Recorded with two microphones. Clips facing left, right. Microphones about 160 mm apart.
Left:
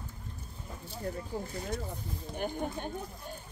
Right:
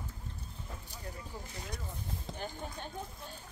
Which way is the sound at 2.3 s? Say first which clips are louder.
Left 10 dB; 55° left (ahead or behind).